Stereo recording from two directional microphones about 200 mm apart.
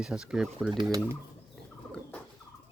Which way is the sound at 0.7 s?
25° right (ahead or behind).